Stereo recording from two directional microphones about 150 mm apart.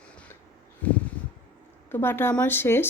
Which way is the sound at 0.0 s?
5° left (ahead or behind).